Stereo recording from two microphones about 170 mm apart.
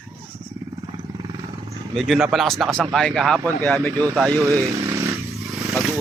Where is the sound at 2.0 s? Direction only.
Centre (ahead or behind).